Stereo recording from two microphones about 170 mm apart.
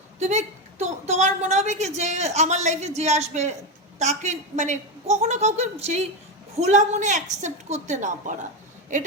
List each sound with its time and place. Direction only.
0.2 s a woman's voice: 40° right (ahead or behind)